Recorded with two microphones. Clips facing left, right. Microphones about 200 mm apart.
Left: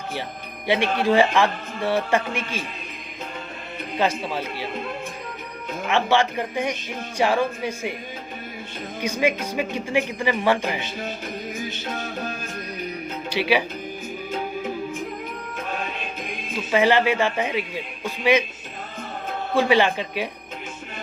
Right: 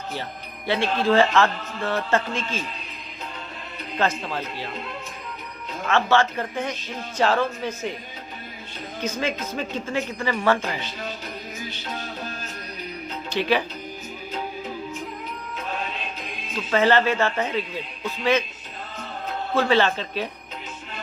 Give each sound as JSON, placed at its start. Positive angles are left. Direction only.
{"t": 0.7, "sound": "speech", "side_deg": 15}
{"t": 3.9, "sound": "speech", "side_deg": 10}
{"t": 5.8, "sound": "speech", "side_deg": 15}
{"t": 9.0, "sound": "speech", "side_deg": 10}
{"t": 11.9, "sound": "music", "side_deg": 50}
{"t": 13.3, "sound": "speech", "side_deg": 10}
{"t": 16.7, "sound": "speech", "side_deg": 15}
{"t": 19.5, "sound": "speech", "side_deg": 15}